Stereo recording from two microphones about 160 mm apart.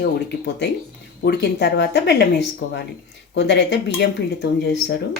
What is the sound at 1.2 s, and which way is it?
Speech, 90° left.